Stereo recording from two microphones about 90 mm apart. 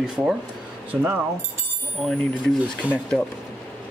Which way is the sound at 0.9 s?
20° right (ahead or behind).